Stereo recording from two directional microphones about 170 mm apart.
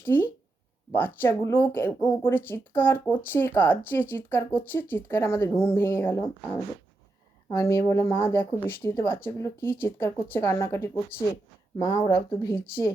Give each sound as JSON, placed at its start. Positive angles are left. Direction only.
{"t": 0.0, "sound": "speech", "side_deg": 10}
{"t": 7.5, "sound": "speech", "side_deg": 15}
{"t": 11.1, "sound": "speech", "side_deg": 60}
{"t": 11.8, "sound": "speech", "side_deg": 25}